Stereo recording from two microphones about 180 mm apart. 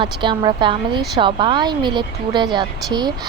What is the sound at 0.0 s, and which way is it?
A woman's voice, 25° right (ahead or behind).